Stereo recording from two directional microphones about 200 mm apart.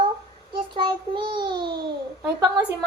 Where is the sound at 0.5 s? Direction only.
25° right (ahead or behind).